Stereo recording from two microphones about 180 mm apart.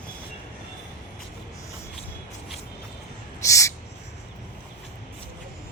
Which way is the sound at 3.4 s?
15° left (ahead or behind).